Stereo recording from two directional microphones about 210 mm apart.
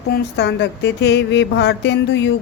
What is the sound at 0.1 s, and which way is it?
Speech, 50° left (ahead or behind).